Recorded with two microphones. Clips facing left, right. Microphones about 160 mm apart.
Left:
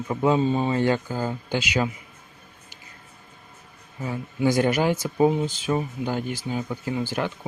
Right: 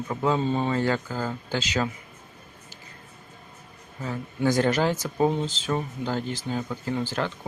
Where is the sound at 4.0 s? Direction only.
15° left (ahead or behind).